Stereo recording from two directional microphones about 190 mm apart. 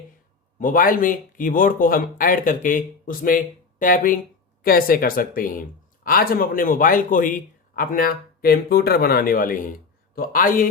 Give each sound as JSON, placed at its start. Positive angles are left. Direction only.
{"t": 0.6, "sound": "speech", "side_deg": 45}